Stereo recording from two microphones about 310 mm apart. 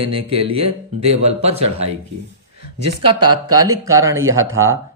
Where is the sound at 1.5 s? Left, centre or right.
Right.